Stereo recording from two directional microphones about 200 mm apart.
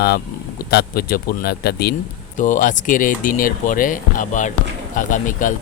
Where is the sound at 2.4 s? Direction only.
40° left (ahead or behind).